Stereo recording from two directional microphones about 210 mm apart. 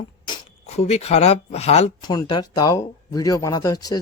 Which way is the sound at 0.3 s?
25° left (ahead or behind).